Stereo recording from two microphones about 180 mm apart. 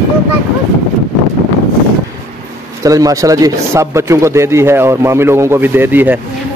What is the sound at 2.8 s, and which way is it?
A man's voice, 20° right (ahead or behind).